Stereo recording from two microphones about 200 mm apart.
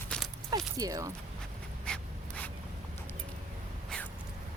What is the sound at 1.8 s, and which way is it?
Writing, 5° left (ahead or behind).